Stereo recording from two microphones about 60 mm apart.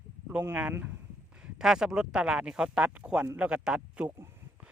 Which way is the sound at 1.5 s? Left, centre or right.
Centre.